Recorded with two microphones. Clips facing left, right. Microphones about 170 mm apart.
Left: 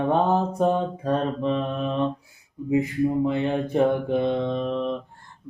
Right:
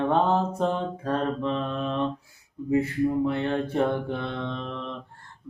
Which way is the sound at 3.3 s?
15° left (ahead or behind).